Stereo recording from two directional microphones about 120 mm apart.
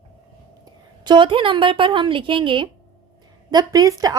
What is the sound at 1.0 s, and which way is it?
Speech, 40° right (ahead or behind).